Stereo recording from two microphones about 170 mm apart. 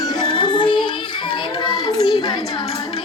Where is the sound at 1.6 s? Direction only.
25° left (ahead or behind).